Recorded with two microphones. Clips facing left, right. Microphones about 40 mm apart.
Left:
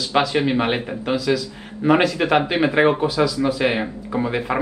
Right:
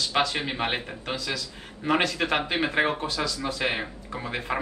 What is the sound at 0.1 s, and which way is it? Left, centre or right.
Speech, centre.